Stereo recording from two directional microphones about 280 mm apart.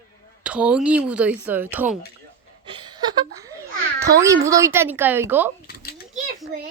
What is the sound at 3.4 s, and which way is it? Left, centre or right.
Babbling, centre.